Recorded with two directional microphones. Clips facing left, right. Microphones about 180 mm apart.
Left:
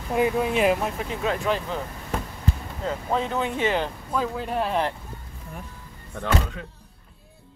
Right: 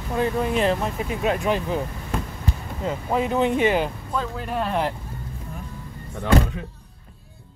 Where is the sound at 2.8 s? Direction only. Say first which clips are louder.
Right 2 dB; 10° right (ahead or behind).